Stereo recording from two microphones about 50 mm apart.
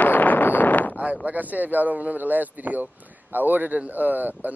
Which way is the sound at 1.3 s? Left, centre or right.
Right.